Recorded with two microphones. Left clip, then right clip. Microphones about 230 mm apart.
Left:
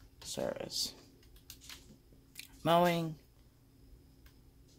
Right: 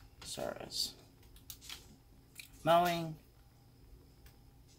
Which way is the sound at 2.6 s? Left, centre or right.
Left.